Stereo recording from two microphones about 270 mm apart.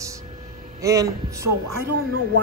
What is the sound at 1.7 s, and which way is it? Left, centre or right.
Speech, right.